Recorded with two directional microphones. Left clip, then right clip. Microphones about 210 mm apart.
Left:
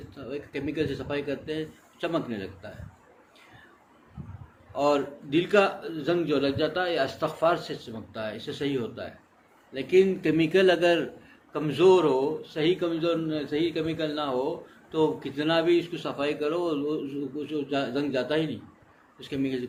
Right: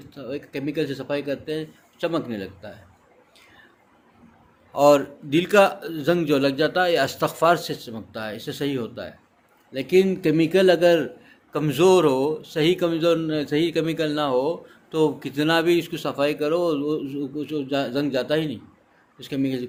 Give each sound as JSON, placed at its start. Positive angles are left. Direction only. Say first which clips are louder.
{"t": 0.1, "sound": "speech", "louder": "right 4 dB", "side_deg": -50}
{"t": 4.7, "sound": "speech", "louder": "right 8 dB", "side_deg": -55}
{"t": 11.5, "sound": "speech", "louder": "right 3 dB", "side_deg": -55}